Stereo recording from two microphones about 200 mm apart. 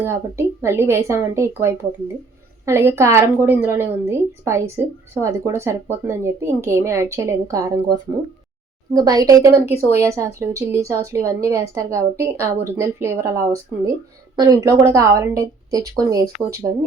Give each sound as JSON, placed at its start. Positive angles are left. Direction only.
{"t": 0.0, "sound": "a woman's voice", "side_deg": -15}